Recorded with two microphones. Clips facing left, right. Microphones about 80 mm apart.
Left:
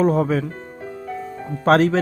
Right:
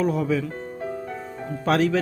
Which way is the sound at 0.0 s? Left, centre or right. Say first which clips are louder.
Left 5 dB; left.